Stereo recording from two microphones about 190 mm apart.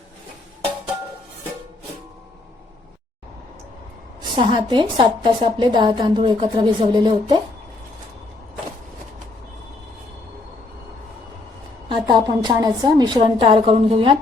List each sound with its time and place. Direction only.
4.2 s a woman's voice: 25° right (ahead or behind)
11.9 s a woman's voice: 25° right (ahead or behind)